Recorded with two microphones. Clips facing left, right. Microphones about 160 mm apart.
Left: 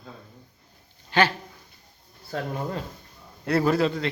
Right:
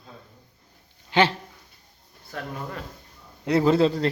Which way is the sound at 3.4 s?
20° right (ahead or behind).